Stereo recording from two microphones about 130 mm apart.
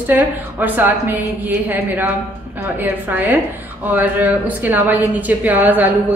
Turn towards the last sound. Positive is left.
turn(degrees=-15)  # may be behind; listen again after turning